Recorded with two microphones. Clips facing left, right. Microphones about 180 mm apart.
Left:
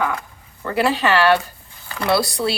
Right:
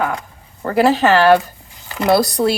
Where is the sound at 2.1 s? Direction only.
45° right (ahead or behind).